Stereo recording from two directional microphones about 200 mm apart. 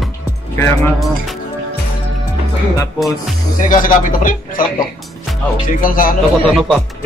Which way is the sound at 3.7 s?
40° left (ahead or behind).